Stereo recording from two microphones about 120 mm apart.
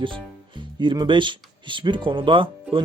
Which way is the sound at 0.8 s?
40° right (ahead or behind).